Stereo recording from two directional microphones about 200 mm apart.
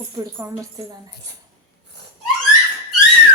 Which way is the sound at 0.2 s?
20° right (ahead or behind).